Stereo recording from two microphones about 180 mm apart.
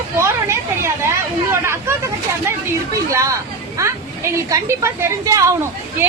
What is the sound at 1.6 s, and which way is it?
Hubbub, 15° right (ahead or behind).